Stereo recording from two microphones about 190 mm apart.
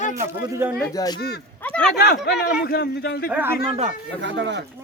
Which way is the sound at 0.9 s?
20° left (ahead or behind).